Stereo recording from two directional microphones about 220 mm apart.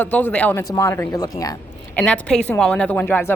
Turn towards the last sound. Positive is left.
turn(degrees=10)  # may be behind; listen again after turning